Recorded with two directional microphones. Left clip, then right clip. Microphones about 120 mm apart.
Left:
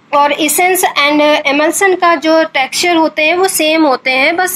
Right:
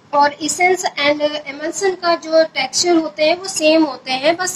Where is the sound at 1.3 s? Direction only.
35° left (ahead or behind).